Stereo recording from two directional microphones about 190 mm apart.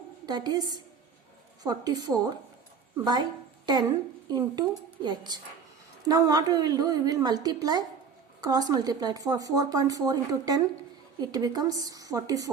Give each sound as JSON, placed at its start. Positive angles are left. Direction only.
{"t": 0.3, "sound": "speech", "side_deg": -20}
{"t": 4.3, "sound": "speech", "side_deg": -20}